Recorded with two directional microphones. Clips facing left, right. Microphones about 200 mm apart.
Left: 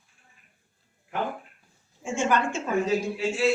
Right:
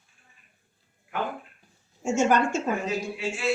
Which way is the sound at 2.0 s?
45° right (ahead or behind).